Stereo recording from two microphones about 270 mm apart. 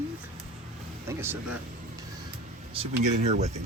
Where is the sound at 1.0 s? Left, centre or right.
Centre.